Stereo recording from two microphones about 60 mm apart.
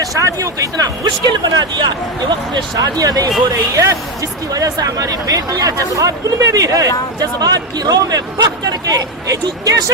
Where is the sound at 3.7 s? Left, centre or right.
Right.